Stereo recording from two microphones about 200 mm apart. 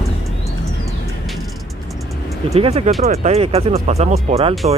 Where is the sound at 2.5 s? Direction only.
30° right (ahead or behind).